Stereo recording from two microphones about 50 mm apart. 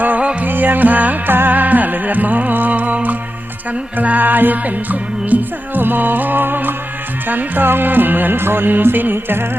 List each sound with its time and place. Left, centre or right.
0.0 s music: right